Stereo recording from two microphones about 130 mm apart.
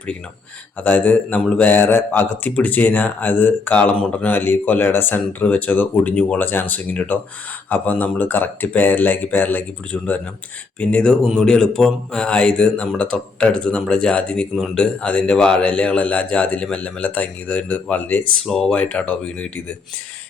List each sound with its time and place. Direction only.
0.8 s a man's voice: 15° left (ahead or behind)